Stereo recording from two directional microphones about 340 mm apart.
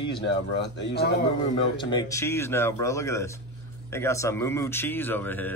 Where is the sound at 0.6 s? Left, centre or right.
Left.